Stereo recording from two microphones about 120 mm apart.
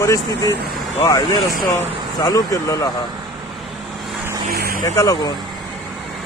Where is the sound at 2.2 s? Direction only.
25° left (ahead or behind).